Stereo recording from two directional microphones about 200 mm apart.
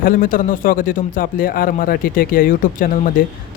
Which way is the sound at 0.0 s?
45° left (ahead or behind).